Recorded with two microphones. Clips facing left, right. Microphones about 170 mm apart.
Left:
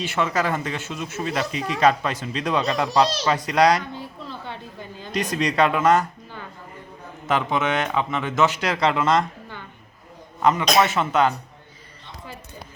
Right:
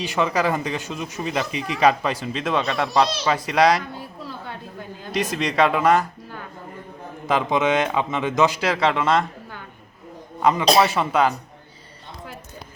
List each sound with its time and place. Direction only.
0.0 s a man's voice: 15° right (ahead or behind)
4.3 s a sound: 5° right (ahead or behind)
7.3 s a man's voice: 15° right (ahead or behind)
8.6 s a man's voice: centre (ahead or behind)